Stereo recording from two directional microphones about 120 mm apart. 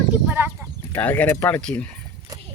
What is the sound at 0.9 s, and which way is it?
Speech, 15° left (ahead or behind).